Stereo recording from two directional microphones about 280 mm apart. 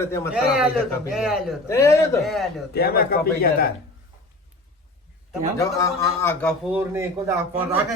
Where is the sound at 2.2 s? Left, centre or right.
Centre.